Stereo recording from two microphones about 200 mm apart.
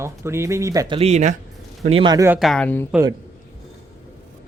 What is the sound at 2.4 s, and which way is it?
Speech, 5° left (ahead or behind).